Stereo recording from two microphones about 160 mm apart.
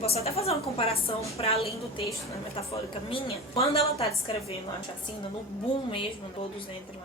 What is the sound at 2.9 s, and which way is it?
A woman's voice, 35° left (ahead or behind).